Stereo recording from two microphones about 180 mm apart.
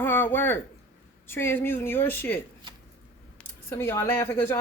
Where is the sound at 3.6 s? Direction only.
10° left (ahead or behind).